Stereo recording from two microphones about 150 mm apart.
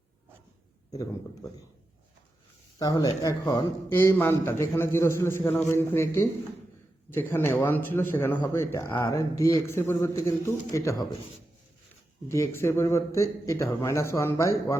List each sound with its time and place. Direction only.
2.7 s a man's voice: 25° left (ahead or behind)
3.8 s a man's voice: 15° left (ahead or behind)
12.3 s a man's voice: 20° left (ahead or behind)